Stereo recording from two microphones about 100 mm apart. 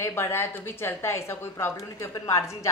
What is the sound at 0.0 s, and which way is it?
Speech, 25° left (ahead or behind).